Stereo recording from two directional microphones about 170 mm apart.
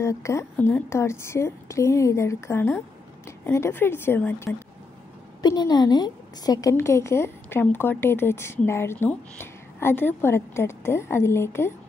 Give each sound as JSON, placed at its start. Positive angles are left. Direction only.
{"t": 0.0, "sound": "a woman's voice", "side_deg": 15}
{"t": 5.4, "sound": "a woman's voice", "side_deg": 25}